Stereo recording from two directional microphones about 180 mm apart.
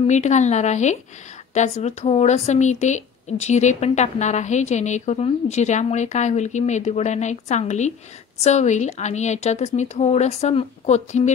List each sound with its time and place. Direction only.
0.0 s a woman's voice: 40° left (ahead or behind)